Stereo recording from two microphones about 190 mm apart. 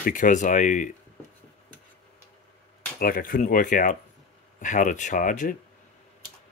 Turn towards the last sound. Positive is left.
turn(degrees=45)  # may be behind; listen again after turning